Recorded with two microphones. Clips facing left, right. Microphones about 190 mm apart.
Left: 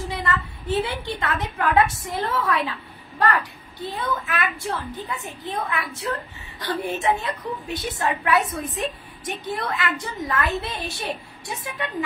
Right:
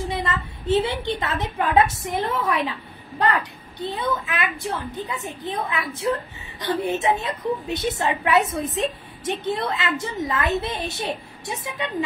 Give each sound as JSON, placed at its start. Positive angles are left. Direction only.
{"t": 0.1, "sound": "a woman's voice", "side_deg": -20}